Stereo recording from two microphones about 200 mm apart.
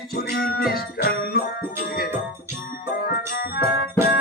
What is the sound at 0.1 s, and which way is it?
Music, 50° left (ahead or behind).